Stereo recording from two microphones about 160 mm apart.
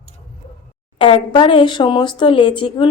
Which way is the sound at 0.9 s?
35° left (ahead or behind).